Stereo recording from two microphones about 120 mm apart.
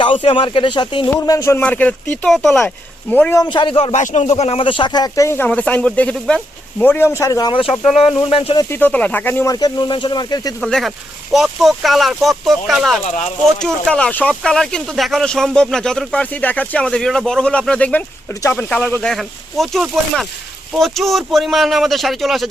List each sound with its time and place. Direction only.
0.0 s speech: 45° left (ahead or behind)
1.1 s speech: 25° left (ahead or behind)
1.5 s speech: 15° left (ahead or behind)
3.5 s speech: 45° left (ahead or behind)
3.9 s speech: 85° left; by 7.5 s 30° left (ahead or behind)
7.5 s speech: 50° left (ahead or behind)
8.7 s speech: 15° left (ahead or behind)
9.5 s speech: 30° left (ahead or behind)
10.6 s speech: 5° left (ahead or behind)
19.1 s speech: centre (ahead or behind)